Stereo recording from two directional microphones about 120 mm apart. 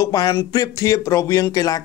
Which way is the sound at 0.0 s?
30° left (ahead or behind).